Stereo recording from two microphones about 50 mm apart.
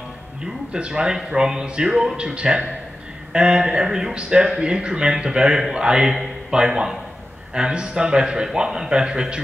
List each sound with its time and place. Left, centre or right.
0.7 s a man's voice: centre